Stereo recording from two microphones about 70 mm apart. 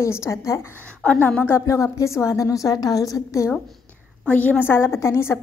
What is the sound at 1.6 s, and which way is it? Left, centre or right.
A woman's voice, left.